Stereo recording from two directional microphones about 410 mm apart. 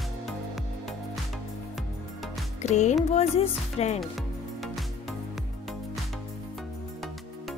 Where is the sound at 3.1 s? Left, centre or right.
Centre.